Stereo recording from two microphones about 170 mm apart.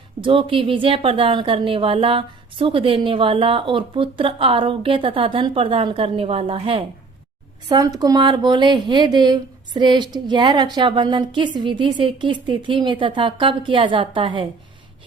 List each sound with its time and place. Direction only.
0.2 s a woman's voice: 30° right (ahead or behind)
7.7 s speech: 20° right (ahead or behind)